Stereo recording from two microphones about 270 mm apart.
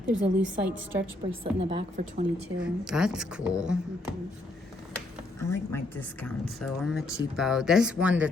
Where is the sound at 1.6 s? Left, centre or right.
Right.